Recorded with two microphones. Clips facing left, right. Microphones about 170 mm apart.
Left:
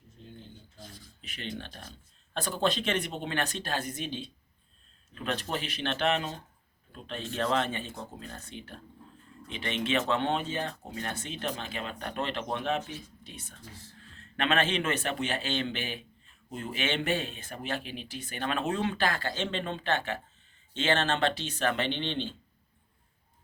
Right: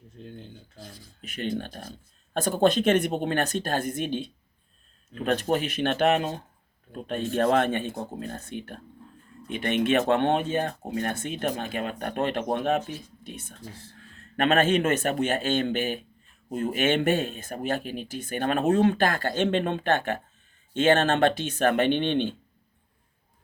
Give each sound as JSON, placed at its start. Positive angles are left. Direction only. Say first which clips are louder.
{"t": 1.2, "sound": "speech", "louder": "right 9 dB", "side_deg": -45}